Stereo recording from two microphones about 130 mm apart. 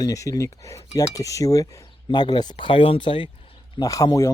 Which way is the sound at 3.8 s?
30° left (ahead or behind).